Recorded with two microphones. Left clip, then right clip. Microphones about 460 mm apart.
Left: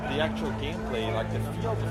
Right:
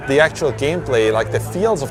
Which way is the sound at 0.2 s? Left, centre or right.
Right.